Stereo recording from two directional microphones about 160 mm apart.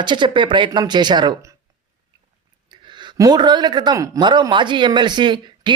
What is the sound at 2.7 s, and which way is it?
Speech, 30° right (ahead or behind).